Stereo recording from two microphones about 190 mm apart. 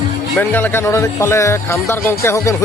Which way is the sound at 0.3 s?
10° left (ahead or behind).